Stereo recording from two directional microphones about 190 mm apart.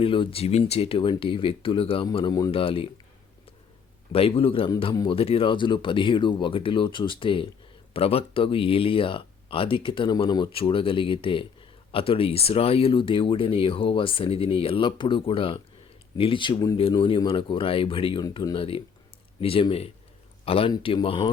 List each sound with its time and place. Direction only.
0.0 s speech: 30° left (ahead or behind)
4.1 s speech: 30° left (ahead or behind)